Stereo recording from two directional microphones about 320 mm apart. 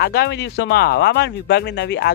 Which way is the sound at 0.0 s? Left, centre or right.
Left.